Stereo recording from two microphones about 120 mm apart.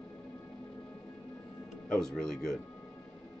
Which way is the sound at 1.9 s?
5° left (ahead or behind).